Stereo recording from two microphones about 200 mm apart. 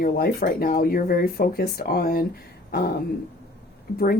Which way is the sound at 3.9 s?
50° left (ahead or behind).